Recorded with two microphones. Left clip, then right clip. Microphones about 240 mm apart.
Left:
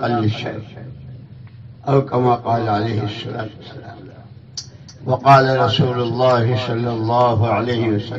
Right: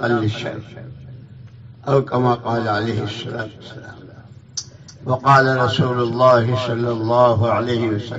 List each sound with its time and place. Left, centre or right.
0.0 s a man's voice: right
1.9 s a man's voice: right
5.0 s a man's voice: right